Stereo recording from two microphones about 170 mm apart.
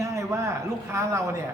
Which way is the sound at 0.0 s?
15° right (ahead or behind).